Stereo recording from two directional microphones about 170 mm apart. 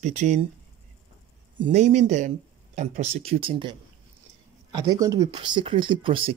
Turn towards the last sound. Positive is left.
turn(degrees=-30)  # may be behind; listen again after turning